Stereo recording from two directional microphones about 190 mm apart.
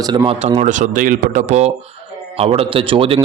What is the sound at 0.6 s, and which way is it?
A man's voice, 40° right (ahead or behind).